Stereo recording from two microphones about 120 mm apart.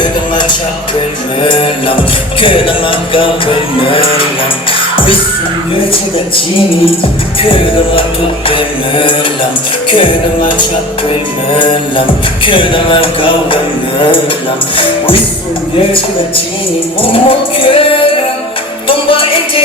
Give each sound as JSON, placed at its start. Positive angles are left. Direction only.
{"t": 0.0, "sound": "music", "side_deg": 40}
{"t": 7.4, "sound": "music", "side_deg": 45}
{"t": 11.6, "sound": "music", "side_deg": 45}
{"t": 14.8, "sound": "music", "side_deg": 45}
{"t": 17.0, "sound": "music", "side_deg": 50}
{"t": 18.9, "sound": "music", "side_deg": 50}